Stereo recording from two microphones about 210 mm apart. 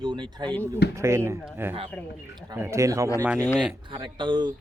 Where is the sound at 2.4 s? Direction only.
15° right (ahead or behind).